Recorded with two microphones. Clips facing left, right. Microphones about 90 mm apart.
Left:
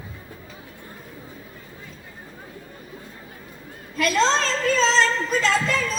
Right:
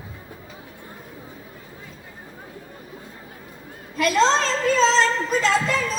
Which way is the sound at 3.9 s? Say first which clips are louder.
Right 2 dB; 20° right (ahead or behind).